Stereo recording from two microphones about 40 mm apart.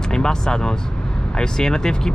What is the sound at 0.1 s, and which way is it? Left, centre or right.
Speech, centre.